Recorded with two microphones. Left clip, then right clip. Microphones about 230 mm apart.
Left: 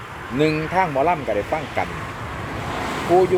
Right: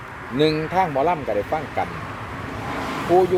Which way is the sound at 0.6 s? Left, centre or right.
Centre.